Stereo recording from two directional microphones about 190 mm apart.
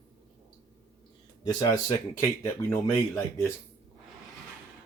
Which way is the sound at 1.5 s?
20° left (ahead or behind).